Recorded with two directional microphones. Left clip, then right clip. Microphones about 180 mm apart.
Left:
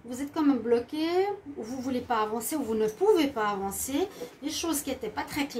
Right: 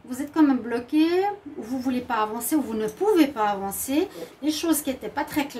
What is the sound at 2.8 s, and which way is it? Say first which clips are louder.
Speech: right 2 dB; 50° right (ahead or behind).